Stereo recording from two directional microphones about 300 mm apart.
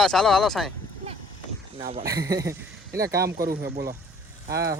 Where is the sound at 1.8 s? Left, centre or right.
Centre.